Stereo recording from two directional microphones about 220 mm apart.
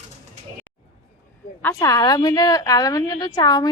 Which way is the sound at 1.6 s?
10° left (ahead or behind).